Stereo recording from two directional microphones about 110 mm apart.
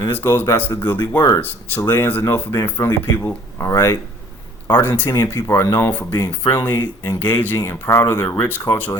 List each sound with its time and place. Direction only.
0.1 s speech: 20° left (ahead or behind)